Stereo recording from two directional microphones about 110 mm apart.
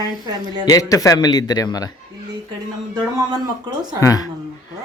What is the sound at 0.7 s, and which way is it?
Speech, 30° left (ahead or behind).